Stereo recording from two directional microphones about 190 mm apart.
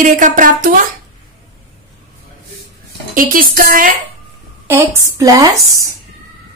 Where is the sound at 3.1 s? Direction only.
45° right (ahead or behind).